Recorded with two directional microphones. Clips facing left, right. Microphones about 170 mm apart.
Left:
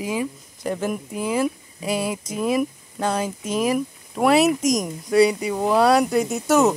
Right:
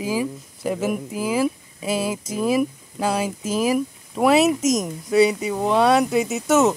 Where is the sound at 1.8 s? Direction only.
30° right (ahead or behind).